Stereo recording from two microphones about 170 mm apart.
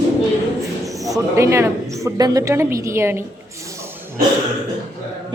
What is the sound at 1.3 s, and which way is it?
A woman's voice, 15° right (ahead or behind).